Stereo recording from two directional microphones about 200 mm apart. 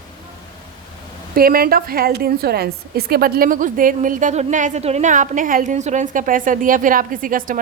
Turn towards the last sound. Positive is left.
turn(degrees=-45)  # may be behind; listen again after turning